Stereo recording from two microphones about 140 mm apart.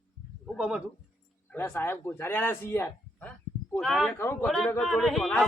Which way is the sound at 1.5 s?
15° left (ahead or behind).